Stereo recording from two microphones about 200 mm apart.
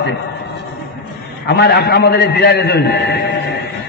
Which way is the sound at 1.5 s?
55° left (ahead or behind).